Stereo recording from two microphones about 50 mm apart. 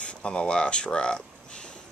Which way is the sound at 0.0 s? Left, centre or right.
Left.